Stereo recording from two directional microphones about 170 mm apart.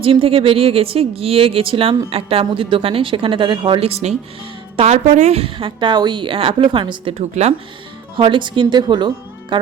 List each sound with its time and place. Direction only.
0.0 s a woman's voice: 35° right (ahead or behind)